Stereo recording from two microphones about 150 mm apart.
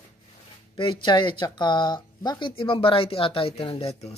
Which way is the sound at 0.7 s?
30° left (ahead or behind).